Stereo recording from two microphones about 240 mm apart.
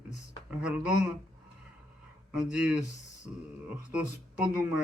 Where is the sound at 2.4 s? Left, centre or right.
Centre.